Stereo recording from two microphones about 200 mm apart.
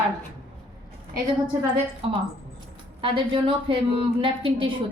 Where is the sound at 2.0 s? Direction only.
30° right (ahead or behind).